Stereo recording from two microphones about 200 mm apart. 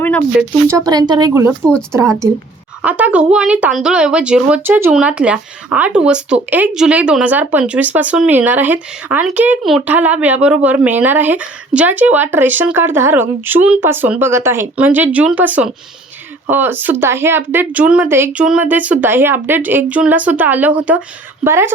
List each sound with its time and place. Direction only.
0.4 s speech: 5° right (ahead or behind)
0.9 s speech: 20° right (ahead or behind)
1.6 s speech: 5° left (ahead or behind)
2.8 s speech: 5° right (ahead or behind)